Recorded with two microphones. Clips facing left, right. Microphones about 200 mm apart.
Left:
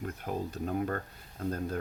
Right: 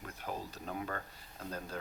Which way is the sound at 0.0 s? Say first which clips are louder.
Left 7 dB; 50° left (ahead or behind).